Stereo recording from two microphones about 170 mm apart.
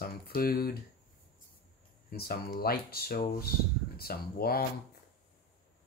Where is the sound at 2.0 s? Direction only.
65° left (ahead or behind).